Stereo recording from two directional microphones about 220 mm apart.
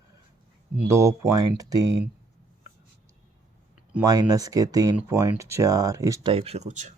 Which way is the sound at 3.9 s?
15° right (ahead or behind).